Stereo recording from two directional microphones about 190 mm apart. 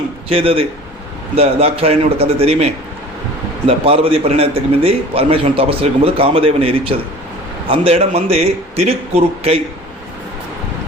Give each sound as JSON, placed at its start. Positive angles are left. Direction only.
{"t": 0.3, "sound": "a man's voice", "side_deg": -30}